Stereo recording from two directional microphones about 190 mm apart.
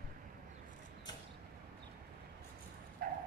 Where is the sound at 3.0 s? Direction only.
50° right (ahead or behind).